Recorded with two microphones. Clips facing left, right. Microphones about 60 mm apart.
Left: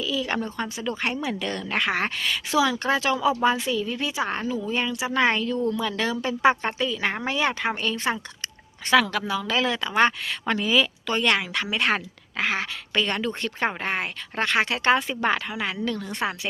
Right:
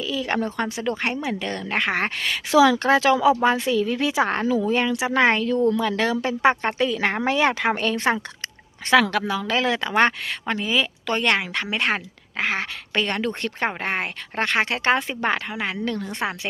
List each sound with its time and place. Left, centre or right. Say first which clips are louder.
0.0 s a sound: right 1 dB; right
0.4 s a woman's voice: right 4 dB; right
1.2 s speech: right 1 dB; right
2.5 s a woman's voice: right 7 dB; right
6.8 s a woman's voice: right 5 dB; right
10.4 s speech: left 1 dB; right
11.2 s speech: even; right